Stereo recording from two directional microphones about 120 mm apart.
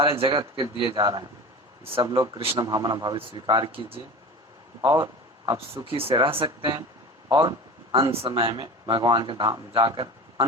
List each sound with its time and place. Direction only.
0.0 s speech: 50° right (ahead or behind)
2.6 s speech: 35° right (ahead or behind)
4.8 s speech: 35° right (ahead or behind)
5.9 s speech: 50° right (ahead or behind)
7.9 s speech: 55° right (ahead or behind)
8.5 s speech: 40° right (ahead or behind)